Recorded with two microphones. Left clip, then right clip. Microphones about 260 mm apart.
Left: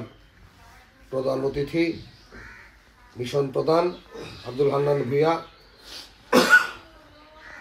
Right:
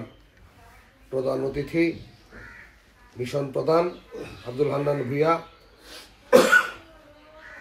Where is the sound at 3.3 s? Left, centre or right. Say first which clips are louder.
Left 1 dB; left.